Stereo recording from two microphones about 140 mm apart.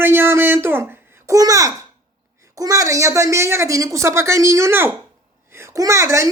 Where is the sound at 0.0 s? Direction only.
15° right (ahead or behind).